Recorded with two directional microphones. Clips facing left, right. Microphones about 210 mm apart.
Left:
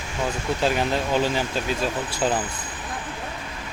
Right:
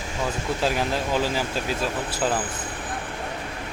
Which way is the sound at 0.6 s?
Centre (ahead or behind).